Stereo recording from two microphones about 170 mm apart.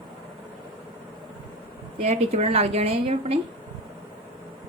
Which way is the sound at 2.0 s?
40° right (ahead or behind).